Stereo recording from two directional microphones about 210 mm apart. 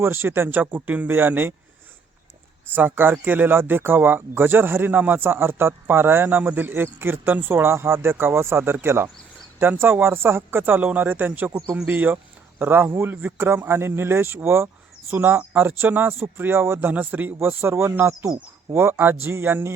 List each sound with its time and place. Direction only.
0.0 s speech: 10° right (ahead or behind)
2.7 s speech: 10° right (ahead or behind)